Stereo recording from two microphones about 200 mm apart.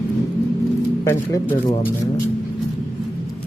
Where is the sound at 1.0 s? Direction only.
15° left (ahead or behind).